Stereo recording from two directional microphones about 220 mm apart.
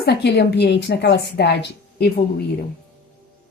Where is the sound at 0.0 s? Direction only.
50° left (ahead or behind).